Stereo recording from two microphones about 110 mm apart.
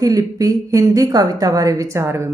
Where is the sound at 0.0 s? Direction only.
30° right (ahead or behind).